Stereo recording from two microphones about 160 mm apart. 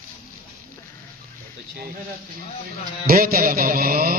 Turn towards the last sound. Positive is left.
turn(degrees=-65)  # may be behind; listen again after turning